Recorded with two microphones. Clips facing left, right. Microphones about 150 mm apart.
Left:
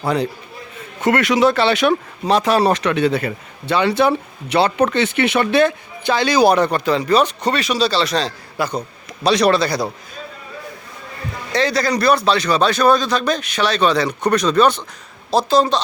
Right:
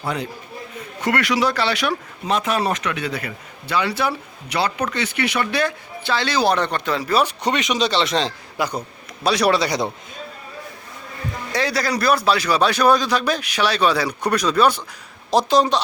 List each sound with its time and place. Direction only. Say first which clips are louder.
0.0 s a man's voice: left 7 dB; 35° left (ahead or behind)
1.0 s a man's voice: left 5 dB; 25° left (ahead or behind)
2.2 s a man's voice: left 6 dB; 35° left (ahead or behind); by 9.8 s 15° right (ahead or behind)
11.5 s a man's voice: left 4 dB; 10° right (ahead or behind)